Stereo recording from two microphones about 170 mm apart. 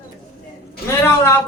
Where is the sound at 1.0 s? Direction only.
15° left (ahead or behind).